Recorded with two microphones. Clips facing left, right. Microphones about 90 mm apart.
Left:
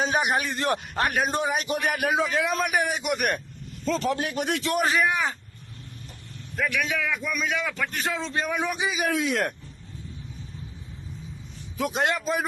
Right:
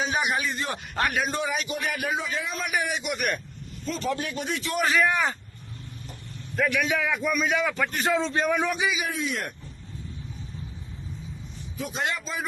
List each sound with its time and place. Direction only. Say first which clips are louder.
0.0 s a man's voice: left 2 dB; 45° left (ahead or behind)
0.4 s a man's voice: left 4 dB; 60° left (ahead or behind)
1.1 s a man's voice: left 2 dB; 45° left (ahead or behind)
1.6 s a man's voice: left 4 dB; 55° left (ahead or behind)
2.1 s a man's voice: left 6 dB; 70° left (ahead or behind); by 3.4 s 50° left (ahead or behind)
3.8 s a man's voice: left 3 dB; 80° left; by 4.8 s 60° left (ahead or behind)
4.8 s a man's voice: right 2 dB; 25° left (ahead or behind)
5.0 s a man's voice: right 1 dB; 5° left (ahead or behind)
6.6 s a man's voice: right 2 dB; centre (ahead or behind)
9.0 s a man's voice: left 5 dB; 90° left
11.8 s a man's voice: left 5 dB; 55° left (ahead or behind)